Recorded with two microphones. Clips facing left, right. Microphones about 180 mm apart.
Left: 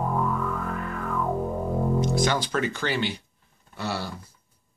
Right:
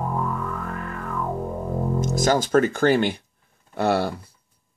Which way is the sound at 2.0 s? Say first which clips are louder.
Right 7 dB; 45° right (ahead or behind).